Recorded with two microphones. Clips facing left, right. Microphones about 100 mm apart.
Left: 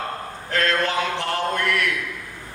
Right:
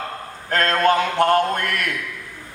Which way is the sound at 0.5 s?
45° right (ahead or behind).